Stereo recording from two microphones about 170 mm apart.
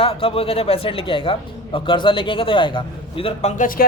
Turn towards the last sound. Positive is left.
turn(degrees=55)  # may be behind; listen again after turning